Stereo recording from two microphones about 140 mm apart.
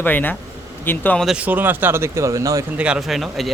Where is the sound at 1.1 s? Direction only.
5° right (ahead or behind); by 2.6 s 20° right (ahead or behind).